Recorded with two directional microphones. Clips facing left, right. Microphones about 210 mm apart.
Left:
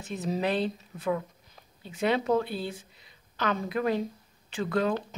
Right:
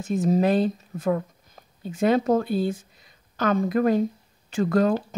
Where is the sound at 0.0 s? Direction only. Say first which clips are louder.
Right 8 dB; 45° right (ahead or behind).